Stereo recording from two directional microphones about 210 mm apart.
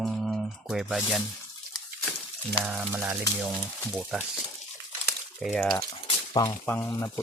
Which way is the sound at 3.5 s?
Centre (ahead or behind).